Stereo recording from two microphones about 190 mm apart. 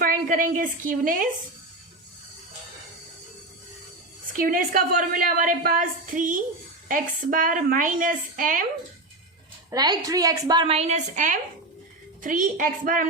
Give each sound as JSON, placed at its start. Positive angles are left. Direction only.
{"t": 0.0, "sound": "a woman's voice", "side_deg": -45}
{"t": 4.4, "sound": "a woman's voice", "side_deg": -45}
{"t": 9.6, "sound": "a woman's voice", "side_deg": -20}